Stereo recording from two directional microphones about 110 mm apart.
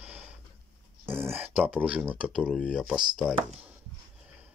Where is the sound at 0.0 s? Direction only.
10° right (ahead or behind).